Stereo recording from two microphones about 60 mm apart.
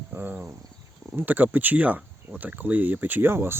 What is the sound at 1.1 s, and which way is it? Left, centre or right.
Speech, right.